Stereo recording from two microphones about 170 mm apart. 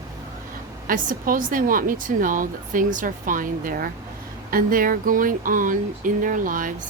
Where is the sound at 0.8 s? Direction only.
55° right (ahead or behind).